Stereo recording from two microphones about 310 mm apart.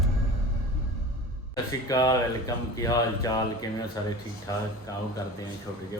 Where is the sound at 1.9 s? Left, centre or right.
Centre.